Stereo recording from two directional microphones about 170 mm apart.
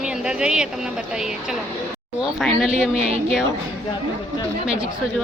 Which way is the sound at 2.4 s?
Centre (ahead or behind).